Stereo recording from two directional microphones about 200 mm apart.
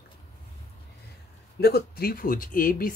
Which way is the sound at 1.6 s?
50° left (ahead or behind).